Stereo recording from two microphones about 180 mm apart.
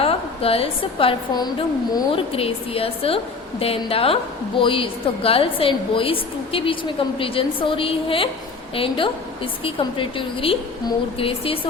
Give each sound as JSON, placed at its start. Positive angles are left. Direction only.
{"t": 0.0, "sound": "a woman's voice", "side_deg": 30}